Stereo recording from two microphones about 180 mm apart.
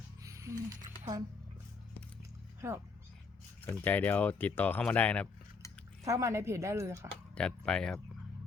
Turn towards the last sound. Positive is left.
turn(degrees=5)  # may be behind; listen again after turning